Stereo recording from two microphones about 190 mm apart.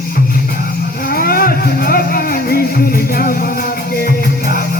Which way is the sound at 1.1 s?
50° left (ahead or behind).